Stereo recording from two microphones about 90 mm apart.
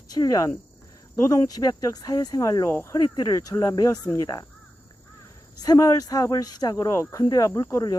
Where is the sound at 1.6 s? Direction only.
45° left (ahead or behind).